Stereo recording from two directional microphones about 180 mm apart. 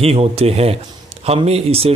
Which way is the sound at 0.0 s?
35° right (ahead or behind).